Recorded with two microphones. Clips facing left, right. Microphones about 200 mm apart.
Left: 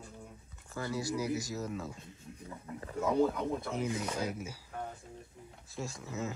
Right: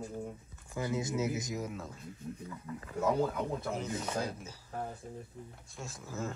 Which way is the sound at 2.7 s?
30° left (ahead or behind).